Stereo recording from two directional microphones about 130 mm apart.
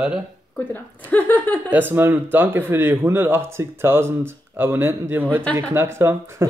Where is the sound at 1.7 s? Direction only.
15° right (ahead or behind).